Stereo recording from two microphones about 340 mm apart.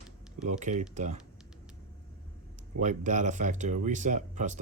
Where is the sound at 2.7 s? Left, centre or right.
Right.